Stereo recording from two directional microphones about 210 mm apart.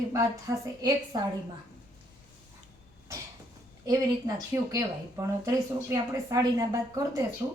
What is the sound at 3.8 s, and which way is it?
A woman's voice, 20° right (ahead or behind).